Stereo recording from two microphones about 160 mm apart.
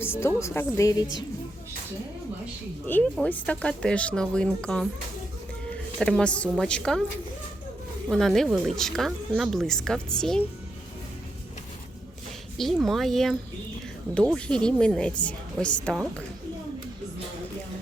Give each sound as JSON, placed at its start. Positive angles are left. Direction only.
{"t": 0.0, "sound": "speech", "side_deg": 15}
{"t": 2.8, "sound": "speech", "side_deg": 10}
{"t": 6.0, "sound": "speech", "side_deg": 5}
{"t": 8.1, "sound": "speech", "side_deg": 0}
{"t": 12.5, "sound": "speech", "side_deg": 0}
{"t": 14.3, "sound": "speech", "side_deg": 5}